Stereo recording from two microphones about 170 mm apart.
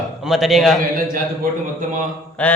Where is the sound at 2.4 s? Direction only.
10° left (ahead or behind).